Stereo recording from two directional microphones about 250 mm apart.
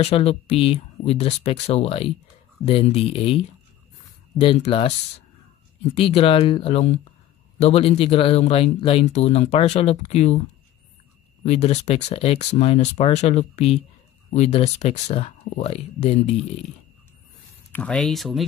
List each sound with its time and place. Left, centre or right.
0.0 s speech: left
5.9 s speech: left
11.4 s speech: left
17.7 s speech: centre